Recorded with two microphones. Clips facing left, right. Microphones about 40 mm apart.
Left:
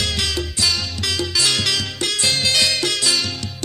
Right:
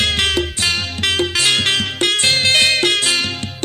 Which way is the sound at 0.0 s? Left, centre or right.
Right.